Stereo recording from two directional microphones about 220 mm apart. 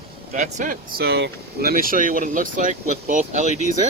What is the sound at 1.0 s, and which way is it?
Speech, 45° right (ahead or behind).